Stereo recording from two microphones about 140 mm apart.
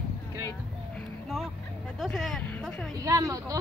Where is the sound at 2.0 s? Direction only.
Centre (ahead or behind).